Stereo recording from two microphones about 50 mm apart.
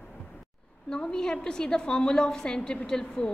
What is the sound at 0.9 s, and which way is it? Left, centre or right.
A woman's voice, centre.